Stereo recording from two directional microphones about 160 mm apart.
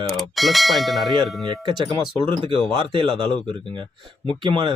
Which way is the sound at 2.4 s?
35° right (ahead or behind).